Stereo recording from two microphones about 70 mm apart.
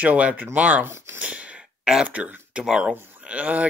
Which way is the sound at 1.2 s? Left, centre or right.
Centre.